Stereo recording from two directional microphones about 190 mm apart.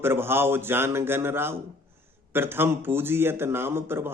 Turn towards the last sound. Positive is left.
turn(degrees=-10)  # may be behind; listen again after turning